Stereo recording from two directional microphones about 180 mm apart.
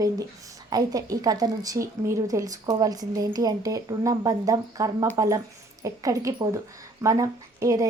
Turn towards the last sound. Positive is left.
turn(degrees=-20)  # may be behind; listen again after turning